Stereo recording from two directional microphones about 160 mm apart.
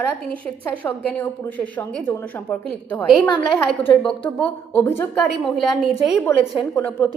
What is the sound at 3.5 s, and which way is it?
A woman's voice, 10° left (ahead or behind).